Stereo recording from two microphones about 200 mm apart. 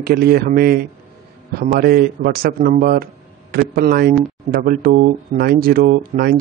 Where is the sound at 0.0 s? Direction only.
50° right (ahead or behind).